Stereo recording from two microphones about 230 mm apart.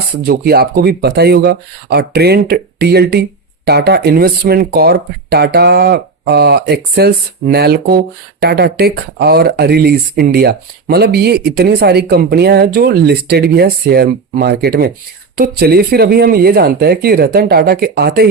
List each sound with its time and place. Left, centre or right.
0.3 s speech: right